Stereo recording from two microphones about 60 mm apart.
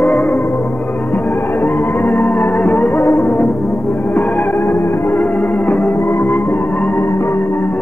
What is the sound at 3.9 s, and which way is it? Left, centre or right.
Music, left.